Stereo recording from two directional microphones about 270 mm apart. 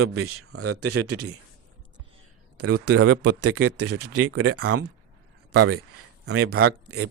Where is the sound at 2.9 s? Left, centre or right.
Right.